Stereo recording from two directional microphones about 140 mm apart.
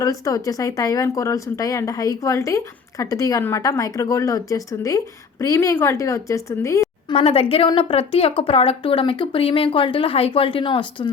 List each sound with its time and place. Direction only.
0.0 s a woman's voice: 25° left (ahead or behind)
7.1 s speech: 45° left (ahead or behind)